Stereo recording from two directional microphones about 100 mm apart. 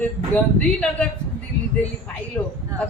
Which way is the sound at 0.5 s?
10° left (ahead or behind).